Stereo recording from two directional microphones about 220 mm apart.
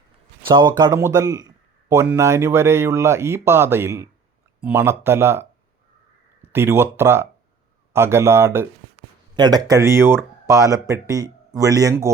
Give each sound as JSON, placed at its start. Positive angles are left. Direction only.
{"t": 0.4, "sound": "speech", "side_deg": -20}
{"t": 6.5, "sound": "speech", "side_deg": -10}